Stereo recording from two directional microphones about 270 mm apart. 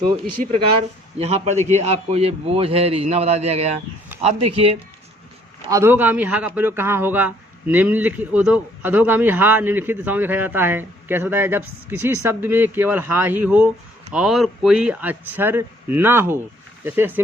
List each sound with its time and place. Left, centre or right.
0.4 s a man's voice: right
5.7 s a man's voice: centre